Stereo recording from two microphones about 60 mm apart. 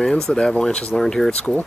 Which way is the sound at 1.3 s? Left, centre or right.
Centre.